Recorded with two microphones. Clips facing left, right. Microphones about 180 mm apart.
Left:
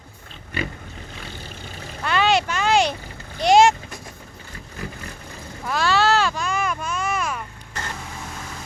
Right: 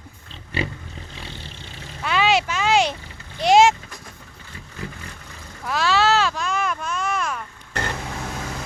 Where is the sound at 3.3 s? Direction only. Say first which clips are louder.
Even; centre (ahead or behind).